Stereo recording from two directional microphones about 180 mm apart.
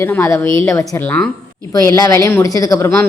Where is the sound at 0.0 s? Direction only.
15° left (ahead or behind).